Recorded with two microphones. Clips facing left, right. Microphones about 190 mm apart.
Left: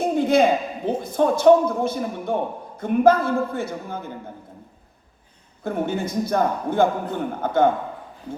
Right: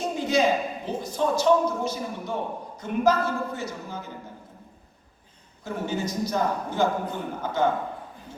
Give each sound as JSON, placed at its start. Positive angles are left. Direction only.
{"t": 0.0, "sound": "a sound", "side_deg": 55}
{"t": 0.9, "sound": "a man's voice", "side_deg": 55}
{"t": 5.6, "sound": "a man's voice", "side_deg": 55}